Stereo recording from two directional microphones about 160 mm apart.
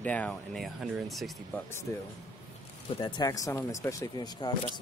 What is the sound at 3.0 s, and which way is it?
Speech, 25° left (ahead or behind).